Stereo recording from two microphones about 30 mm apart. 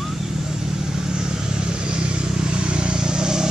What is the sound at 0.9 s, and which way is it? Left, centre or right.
Vehicle, right.